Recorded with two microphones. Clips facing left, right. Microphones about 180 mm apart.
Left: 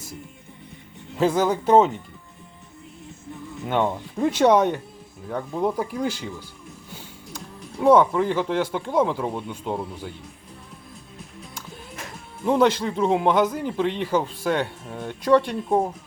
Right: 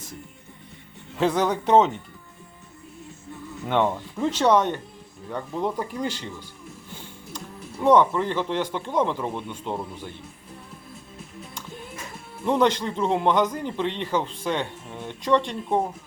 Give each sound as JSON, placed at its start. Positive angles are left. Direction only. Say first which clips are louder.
{"t": 1.2, "sound": "a man's voice", "louder": "left 2 dB", "side_deg": 5}
{"t": 3.7, "sound": "speech", "louder": "even", "side_deg": 10}
{"t": 7.3, "sound": "speech", "louder": "left 2 dB", "side_deg": 5}
{"t": 12.5, "sound": "a man's voice", "louder": "left 2 dB", "side_deg": 5}